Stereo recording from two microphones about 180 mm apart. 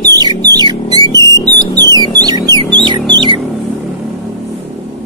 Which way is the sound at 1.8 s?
20° left (ahead or behind).